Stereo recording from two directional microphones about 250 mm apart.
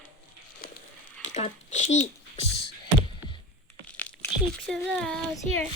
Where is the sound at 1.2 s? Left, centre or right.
Left.